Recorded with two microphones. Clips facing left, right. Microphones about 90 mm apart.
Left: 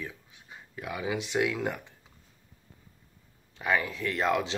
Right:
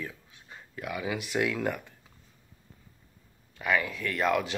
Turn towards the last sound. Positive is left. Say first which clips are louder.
# even
turn(degrees=25)  # may be behind; listen again after turning